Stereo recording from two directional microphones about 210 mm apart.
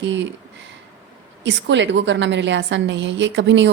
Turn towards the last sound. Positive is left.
turn(degrees=-60)  # may be behind; listen again after turning